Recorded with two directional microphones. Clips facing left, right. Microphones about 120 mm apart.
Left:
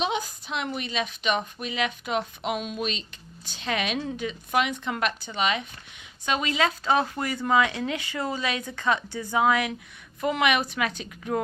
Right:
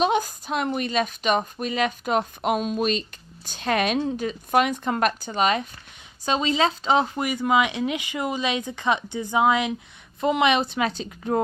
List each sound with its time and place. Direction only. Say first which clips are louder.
0.0 s speech: right 6 dB; 45° right (ahead or behind)
3.9 s speech: right 5 dB; 35° right (ahead or behind)
6.2 s speech: right 3 dB; 30° right (ahead or behind)